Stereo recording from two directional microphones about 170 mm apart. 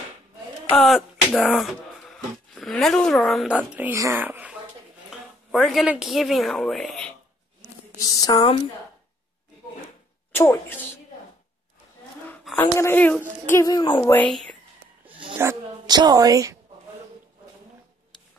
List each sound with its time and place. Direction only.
0.7 s speech: centre (ahead or behind)
3.9 s speech: 20° right (ahead or behind); by 7.2 s 5° left (ahead or behind)
8.0 s speech: 20° left (ahead or behind)
10.3 s speech: 15° left (ahead or behind)
12.5 s speech: 15° left (ahead or behind)
14.1 s speech: 5° left (ahead or behind)
15.3 s a woman's voice: 20° right (ahead or behind)